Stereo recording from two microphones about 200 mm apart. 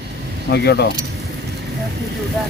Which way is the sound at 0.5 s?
55° left (ahead or behind).